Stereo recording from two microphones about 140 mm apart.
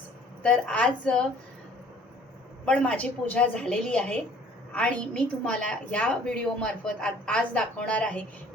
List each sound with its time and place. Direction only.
0.4 s a woman's voice: 5° left (ahead or behind)
2.6 s a woman's voice: 10° left (ahead or behind)